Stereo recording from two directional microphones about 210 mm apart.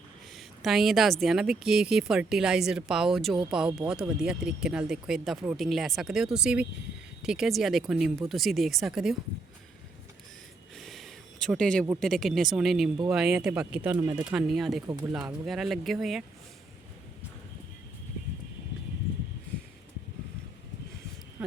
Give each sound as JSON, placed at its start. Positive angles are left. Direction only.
{"t": 0.3, "sound": "a sound", "side_deg": 0}
{"t": 1.2, "sound": "speech", "side_deg": 0}
{"t": 10.8, "sound": "a sound", "side_deg": 0}
{"t": 11.9, "sound": "speech", "side_deg": 0}
{"t": 14.3, "sound": "speech", "side_deg": 0}
{"t": 14.8, "sound": "speech", "side_deg": -20}
{"t": 15.1, "sound": "speech", "side_deg": -5}